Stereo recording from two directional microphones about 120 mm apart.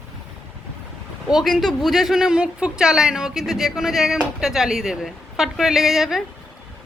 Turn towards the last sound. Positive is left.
turn(degrees=0)  # may be behind; listen again after turning